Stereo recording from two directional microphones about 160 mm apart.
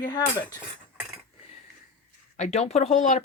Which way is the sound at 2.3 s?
45° left (ahead or behind).